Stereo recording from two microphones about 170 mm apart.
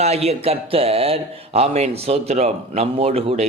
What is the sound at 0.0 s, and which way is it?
A man's voice, 40° right (ahead or behind).